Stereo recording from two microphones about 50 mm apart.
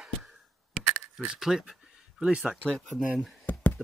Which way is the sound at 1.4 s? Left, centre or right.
Centre.